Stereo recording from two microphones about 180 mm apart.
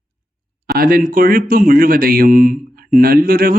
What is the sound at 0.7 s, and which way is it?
Speech, 55° right (ahead or behind).